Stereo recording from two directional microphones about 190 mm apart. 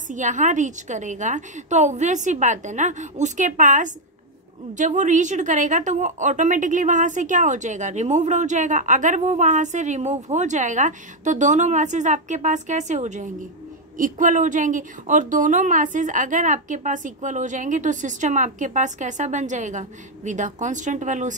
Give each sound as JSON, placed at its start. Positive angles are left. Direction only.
{"t": 0.1, "sound": "a woman's voice", "side_deg": -40}